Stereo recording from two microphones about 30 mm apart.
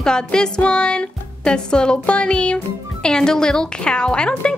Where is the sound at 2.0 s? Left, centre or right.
Left.